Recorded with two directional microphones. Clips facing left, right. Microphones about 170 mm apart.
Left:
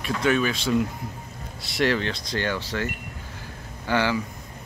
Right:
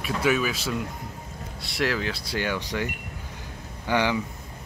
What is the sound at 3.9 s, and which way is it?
Speech, 15° right (ahead or behind).